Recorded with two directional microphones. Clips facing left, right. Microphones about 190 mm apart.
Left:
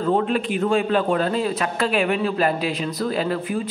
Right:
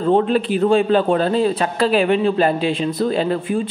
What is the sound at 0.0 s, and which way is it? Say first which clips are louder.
A man's voice: right 4 dB; 30° right (ahead or behind).